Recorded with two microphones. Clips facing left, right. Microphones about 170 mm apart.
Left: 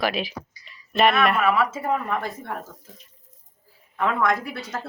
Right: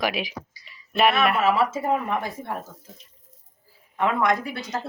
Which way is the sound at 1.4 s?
25° right (ahead or behind).